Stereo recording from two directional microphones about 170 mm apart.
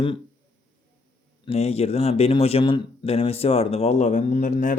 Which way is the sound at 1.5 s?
40° left (ahead or behind).